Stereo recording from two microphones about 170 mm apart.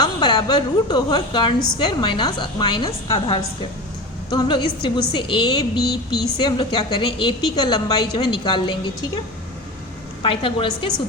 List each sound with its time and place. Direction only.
0.0 s a woman's voice: 25° left (ahead or behind)
10.2 s a woman's voice: 30° left (ahead or behind)